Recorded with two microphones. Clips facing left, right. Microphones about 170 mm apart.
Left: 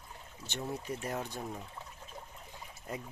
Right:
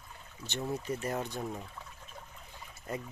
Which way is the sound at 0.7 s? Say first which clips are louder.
Right 3 dB; 5° right (ahead or behind).